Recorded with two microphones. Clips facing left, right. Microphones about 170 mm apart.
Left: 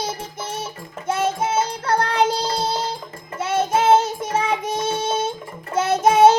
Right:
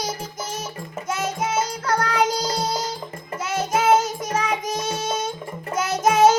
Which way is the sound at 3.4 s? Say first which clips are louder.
Left 3 dB; 30° left (ahead or behind).